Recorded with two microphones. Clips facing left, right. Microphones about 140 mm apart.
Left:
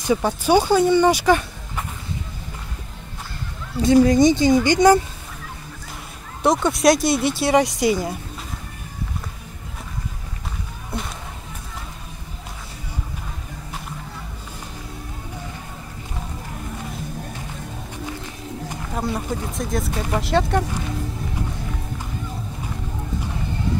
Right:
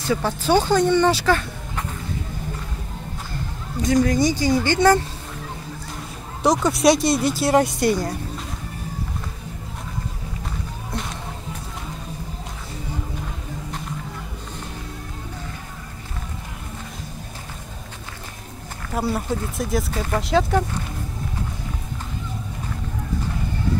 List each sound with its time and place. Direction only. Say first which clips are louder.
0.0 s speech: left 2 dB; 15° left (ahead or behind)
3.8 s speech: left 5 dB; 25° left (ahead or behind)
6.4 s speech: even; centre (ahead or behind)
18.9 s speech: right 2 dB; 5° right (ahead or behind)